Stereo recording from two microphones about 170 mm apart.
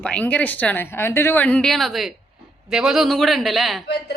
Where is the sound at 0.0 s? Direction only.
5° left (ahead or behind).